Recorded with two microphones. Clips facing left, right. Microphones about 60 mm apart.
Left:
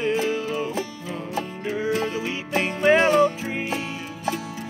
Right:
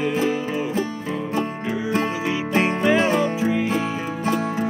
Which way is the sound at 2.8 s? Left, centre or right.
Left.